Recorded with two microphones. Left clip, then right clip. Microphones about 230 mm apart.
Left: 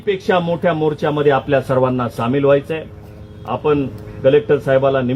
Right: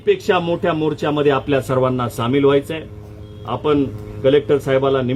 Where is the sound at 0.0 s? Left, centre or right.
Right.